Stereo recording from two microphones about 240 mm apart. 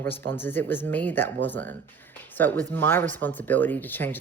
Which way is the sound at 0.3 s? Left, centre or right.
Centre.